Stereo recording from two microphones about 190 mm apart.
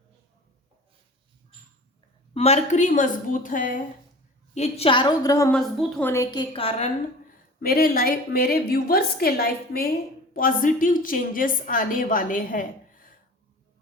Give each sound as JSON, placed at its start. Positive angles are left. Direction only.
{"t": 2.3, "sound": "a woman's voice", "side_deg": 35}
{"t": 4.5, "sound": "a woman's voice", "side_deg": 35}
{"t": 5.5, "sound": "a woman's voice", "side_deg": 5}
{"t": 6.3, "sound": "a woman's voice", "side_deg": 25}
{"t": 7.6, "sound": "a woman's voice", "side_deg": 50}